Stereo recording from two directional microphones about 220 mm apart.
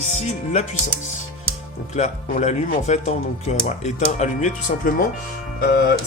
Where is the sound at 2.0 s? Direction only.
35° left (ahead or behind).